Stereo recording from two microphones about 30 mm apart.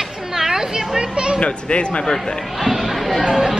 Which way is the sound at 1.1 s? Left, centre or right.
Right.